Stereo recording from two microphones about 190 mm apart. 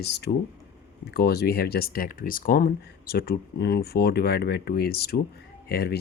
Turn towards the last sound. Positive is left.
turn(degrees=55)  # may be behind; listen again after turning